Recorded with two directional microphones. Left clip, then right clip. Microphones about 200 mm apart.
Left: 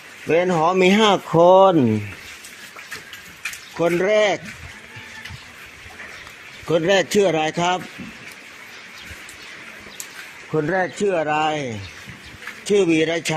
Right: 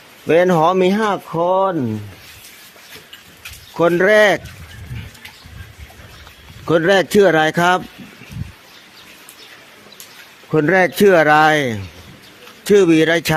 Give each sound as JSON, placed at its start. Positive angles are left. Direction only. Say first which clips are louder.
{"t": 0.3, "sound": "speech", "louder": "right 5 dB", "side_deg": -30}
{"t": 0.8, "sound": "speech", "louder": "left 1 dB", "side_deg": -5}
{"t": 1.4, "sound": "speech", "louder": "left 5 dB", "side_deg": 15}
{"t": 3.8, "sound": "speech", "louder": "right 6 dB", "side_deg": -25}
{"t": 6.7, "sound": "speech", "louder": "right 4 dB", "side_deg": -30}
{"t": 10.5, "sound": "speech", "louder": "right 7 dB", "side_deg": -55}